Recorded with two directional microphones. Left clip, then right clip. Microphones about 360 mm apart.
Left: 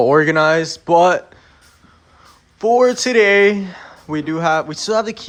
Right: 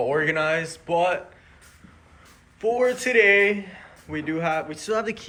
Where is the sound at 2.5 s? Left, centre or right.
Centre.